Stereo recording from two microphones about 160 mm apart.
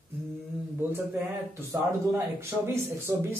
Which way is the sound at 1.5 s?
15° right (ahead or behind).